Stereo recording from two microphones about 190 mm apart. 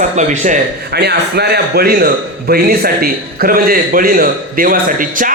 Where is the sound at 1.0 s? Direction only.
60° right (ahead or behind).